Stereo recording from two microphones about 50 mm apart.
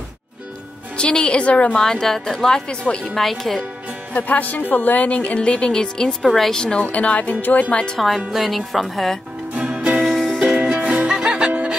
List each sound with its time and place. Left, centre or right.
0.9 s a woman's voice: centre
1.8 s a woman's voice: centre
2.8 s a woman's voice: left
3.2 s speech: centre
4.1 s a woman's voice: left; by 6.1 s centre
6.2 s speech: centre
6.8 s a woman's voice: left
7.7 s a woman's voice: centre
8.3 s speech: centre
9.6 s music: right
10.0 s music: centre
10.5 s music: right